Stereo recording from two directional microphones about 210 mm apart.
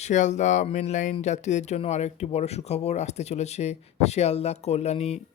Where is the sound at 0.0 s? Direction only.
35° left (ahead or behind).